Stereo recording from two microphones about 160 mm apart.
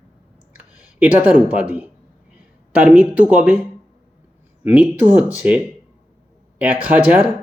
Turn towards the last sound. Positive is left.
turn(degrees=-10)  # may be behind; listen again after turning